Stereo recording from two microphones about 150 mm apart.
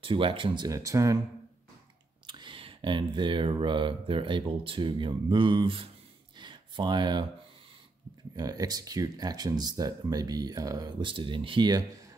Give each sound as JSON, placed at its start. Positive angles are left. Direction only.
{"t": 0.0, "sound": "speech", "side_deg": -35}
{"t": 2.2, "sound": "speech", "side_deg": -30}
{"t": 6.3, "sound": "a sound", "side_deg": -30}
{"t": 8.4, "sound": "speech", "side_deg": -25}